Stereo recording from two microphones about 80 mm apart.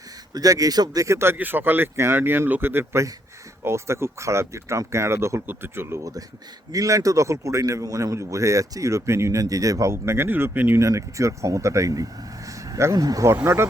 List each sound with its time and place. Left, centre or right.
0.3 s speech: right
1.0 s speech: right
6.7 s speech: right
9.9 s speech: right
10.8 s speech: right
12.5 s a sound: right
13.2 s speech: right